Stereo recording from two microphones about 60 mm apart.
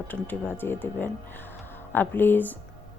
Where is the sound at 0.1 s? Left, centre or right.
Left.